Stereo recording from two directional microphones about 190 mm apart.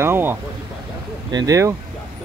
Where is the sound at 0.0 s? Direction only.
10° right (ahead or behind).